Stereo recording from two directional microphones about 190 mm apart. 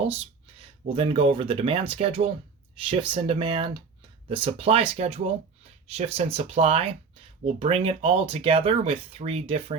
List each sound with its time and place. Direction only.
0.9 s speech: 25° right (ahead or behind)